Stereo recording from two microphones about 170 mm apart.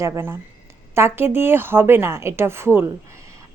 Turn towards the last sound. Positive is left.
turn(degrees=-15)  # may be behind; listen again after turning